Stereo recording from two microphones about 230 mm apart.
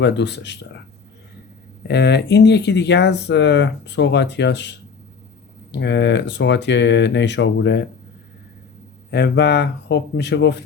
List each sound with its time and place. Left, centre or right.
0.0 s speech: left
1.9 s speech: left
5.7 s speech: left
9.0 s speech: left